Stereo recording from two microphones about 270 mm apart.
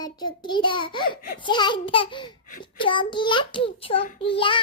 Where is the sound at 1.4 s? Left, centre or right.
Centre.